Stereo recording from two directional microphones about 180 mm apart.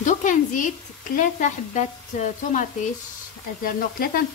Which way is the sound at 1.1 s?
45° left (ahead or behind).